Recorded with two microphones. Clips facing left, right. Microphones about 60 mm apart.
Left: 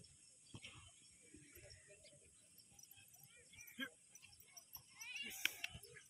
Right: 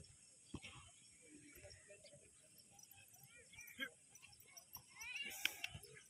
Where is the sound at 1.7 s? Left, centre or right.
Centre.